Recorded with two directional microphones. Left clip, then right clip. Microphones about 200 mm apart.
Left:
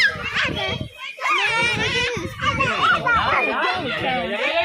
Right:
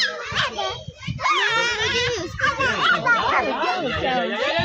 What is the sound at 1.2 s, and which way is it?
Speech, 15° right (ahead or behind).